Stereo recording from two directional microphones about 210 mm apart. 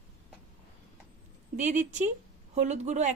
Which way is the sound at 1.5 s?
35° right (ahead or behind).